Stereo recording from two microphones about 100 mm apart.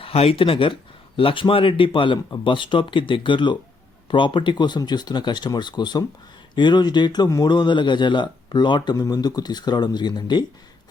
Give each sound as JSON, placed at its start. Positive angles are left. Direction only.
{"t": 0.0, "sound": "speech", "side_deg": 80}